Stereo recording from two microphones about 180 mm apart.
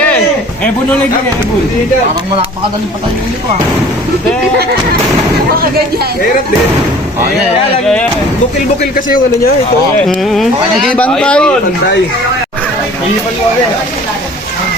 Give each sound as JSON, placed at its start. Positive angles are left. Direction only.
{"t": 8.8, "sound": "speech", "side_deg": 50}
{"t": 10.0, "sound": "speech", "side_deg": 5}